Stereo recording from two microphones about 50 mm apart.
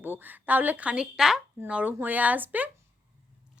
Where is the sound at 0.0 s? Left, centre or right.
Right.